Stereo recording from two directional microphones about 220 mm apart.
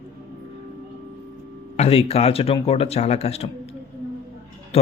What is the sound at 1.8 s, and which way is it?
A man's voice, 25° left (ahead or behind).